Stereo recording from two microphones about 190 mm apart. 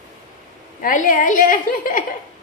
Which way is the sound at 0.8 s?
45° left (ahead or behind).